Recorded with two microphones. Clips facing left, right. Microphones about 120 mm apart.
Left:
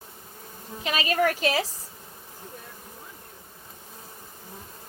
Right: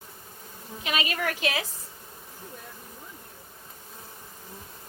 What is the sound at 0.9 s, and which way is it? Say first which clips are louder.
Speech: left 5 dB; 35° left (ahead or behind).